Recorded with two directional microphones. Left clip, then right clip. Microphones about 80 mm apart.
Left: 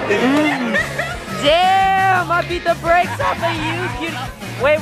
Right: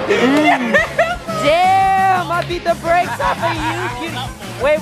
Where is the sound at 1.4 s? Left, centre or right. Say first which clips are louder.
Right 1 dB; right.